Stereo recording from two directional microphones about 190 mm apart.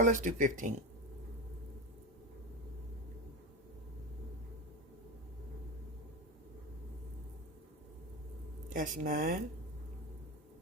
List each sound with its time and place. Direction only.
0.0 s speech: 40° right (ahead or behind)
8.7 s speech: 45° right (ahead or behind)